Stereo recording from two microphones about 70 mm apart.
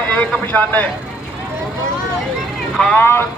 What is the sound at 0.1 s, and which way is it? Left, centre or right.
Speech, left.